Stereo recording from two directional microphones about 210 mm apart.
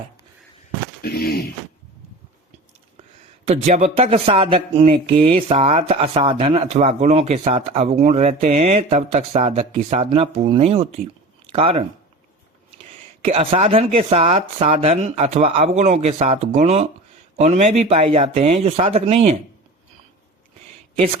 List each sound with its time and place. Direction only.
1.0 s a sound: 50° left (ahead or behind)
3.4 s speech: 30° right (ahead or behind)
13.2 s speech: 25° right (ahead or behind)